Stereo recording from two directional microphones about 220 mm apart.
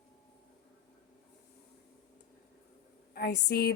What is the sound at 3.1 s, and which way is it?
Speech, 45° left (ahead or behind).